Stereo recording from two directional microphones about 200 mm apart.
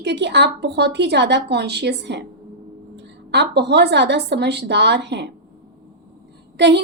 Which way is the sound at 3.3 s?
55° right (ahead or behind).